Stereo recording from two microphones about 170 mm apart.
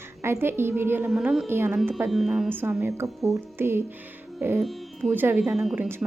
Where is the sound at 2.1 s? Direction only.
Centre (ahead or behind).